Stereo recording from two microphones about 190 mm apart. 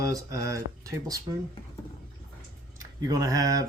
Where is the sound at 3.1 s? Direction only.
20° right (ahead or behind).